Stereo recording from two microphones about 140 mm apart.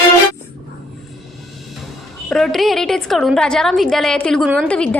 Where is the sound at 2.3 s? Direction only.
Centre (ahead or behind).